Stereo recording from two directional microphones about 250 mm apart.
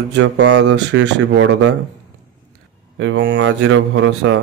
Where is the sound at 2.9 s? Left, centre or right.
Right.